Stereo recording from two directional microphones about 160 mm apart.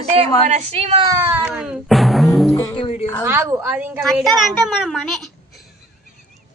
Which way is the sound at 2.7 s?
35° left (ahead or behind).